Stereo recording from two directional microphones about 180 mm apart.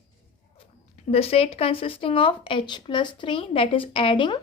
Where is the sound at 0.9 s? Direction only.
35° left (ahead or behind).